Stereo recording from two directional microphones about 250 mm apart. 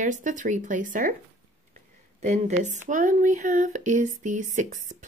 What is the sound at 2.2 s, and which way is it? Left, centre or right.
A woman's voice, right.